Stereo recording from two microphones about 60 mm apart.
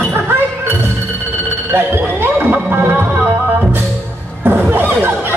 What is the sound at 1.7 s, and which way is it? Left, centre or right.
Speech, right.